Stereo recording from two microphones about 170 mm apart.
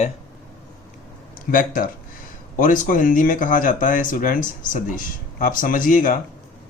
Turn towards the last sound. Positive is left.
turn(degrees=50)  # may be behind; listen again after turning